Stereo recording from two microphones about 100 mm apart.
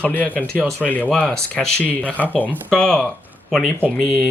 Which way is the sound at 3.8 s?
20° right (ahead or behind).